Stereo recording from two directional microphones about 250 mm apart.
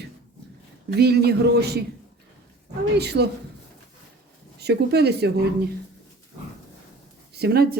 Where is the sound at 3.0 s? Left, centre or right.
Right.